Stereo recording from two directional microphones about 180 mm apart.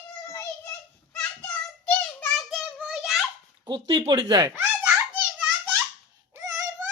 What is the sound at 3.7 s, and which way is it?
Speech, 30° right (ahead or behind).